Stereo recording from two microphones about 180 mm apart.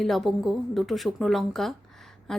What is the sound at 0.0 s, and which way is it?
Speech, centre (ahead or behind).